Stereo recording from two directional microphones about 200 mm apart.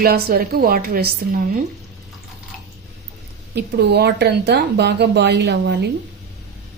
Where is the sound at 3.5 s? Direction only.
55° right (ahead or behind).